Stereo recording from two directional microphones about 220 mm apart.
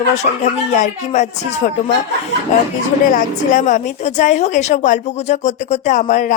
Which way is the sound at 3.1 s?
35° left (ahead or behind).